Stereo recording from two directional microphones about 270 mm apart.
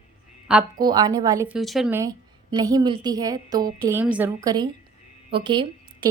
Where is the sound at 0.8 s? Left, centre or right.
Centre.